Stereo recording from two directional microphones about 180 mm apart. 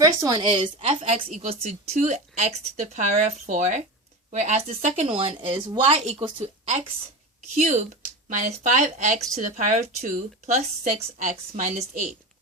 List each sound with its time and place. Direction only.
0.0 s a woman's voice: 20° right (ahead or behind); by 12.1 s 40° right (ahead or behind)